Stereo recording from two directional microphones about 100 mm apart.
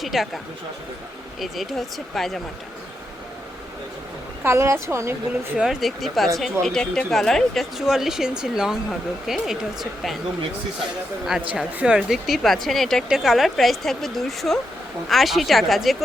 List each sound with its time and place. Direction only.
0.0 s speech: 5° right (ahead or behind)
1.4 s speech: centre (ahead or behind)
4.4 s speech: 25° right (ahead or behind)
5.5 s speech: 5° right (ahead or behind)
11.5 s speech: 10° right (ahead or behind)